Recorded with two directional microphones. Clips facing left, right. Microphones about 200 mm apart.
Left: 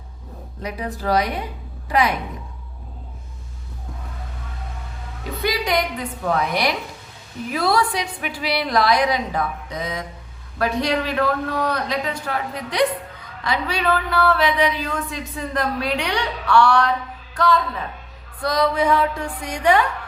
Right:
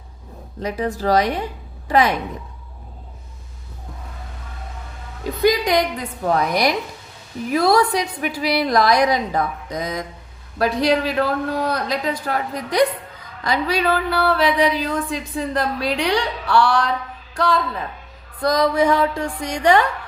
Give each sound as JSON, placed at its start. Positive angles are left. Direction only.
{"t": 0.6, "sound": "a woman's voice", "side_deg": -40}
{"t": 5.4, "sound": "a woman's voice", "side_deg": -40}